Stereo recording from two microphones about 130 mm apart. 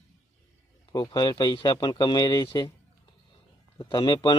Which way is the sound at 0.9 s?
35° left (ahead or behind).